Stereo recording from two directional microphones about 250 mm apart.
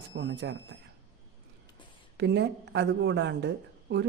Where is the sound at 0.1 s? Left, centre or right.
Right.